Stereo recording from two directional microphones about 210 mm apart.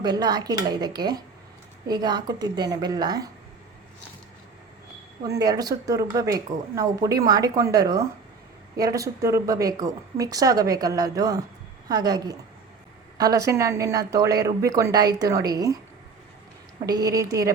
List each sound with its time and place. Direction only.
0.0 s a woman's voice: 20° right (ahead or behind)
5.2 s a woman's voice: 20° right (ahead or behind)
16.8 s a woman's voice: 15° right (ahead or behind)